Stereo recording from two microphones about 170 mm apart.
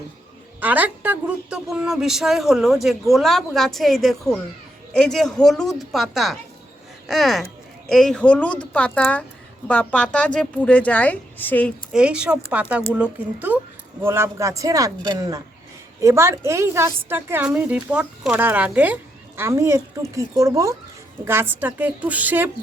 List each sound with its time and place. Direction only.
0.6 s a woman's voice: 10° right (ahead or behind); by 11.7 s 10° left (ahead or behind)
11.9 s a woman's voice: 5° right (ahead or behind)